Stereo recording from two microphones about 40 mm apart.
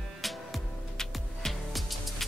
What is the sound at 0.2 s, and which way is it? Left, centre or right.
Music, centre.